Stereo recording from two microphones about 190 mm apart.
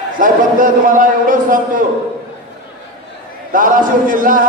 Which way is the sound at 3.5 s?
45° right (ahead or behind).